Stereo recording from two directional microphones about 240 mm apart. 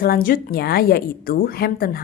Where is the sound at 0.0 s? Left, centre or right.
Left.